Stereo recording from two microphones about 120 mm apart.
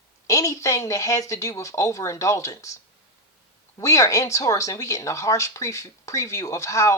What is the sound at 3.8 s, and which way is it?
Speech, 25° left (ahead or behind).